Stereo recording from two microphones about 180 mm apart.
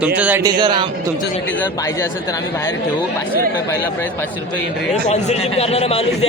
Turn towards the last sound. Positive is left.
turn(degrees=35)  # may be behind; listen again after turning